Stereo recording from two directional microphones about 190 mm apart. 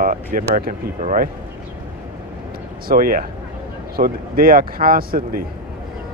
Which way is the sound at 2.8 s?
50° right (ahead or behind).